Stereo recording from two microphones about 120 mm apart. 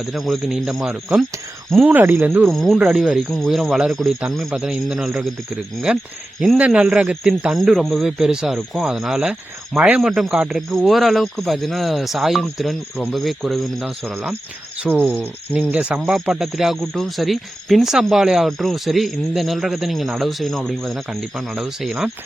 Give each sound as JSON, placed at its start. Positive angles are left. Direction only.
{"t": 0.0, "sound": "speech", "side_deg": 0}
{"t": 1.8, "sound": "speech", "side_deg": -15}
{"t": 2.5, "sound": "speech", "side_deg": 0}
{"t": 7.5, "sound": "speech", "side_deg": 0}
{"t": 14.1, "sound": "speech", "side_deg": -10}